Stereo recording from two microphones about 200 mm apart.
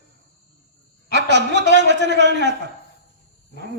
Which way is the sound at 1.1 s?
60° right (ahead or behind).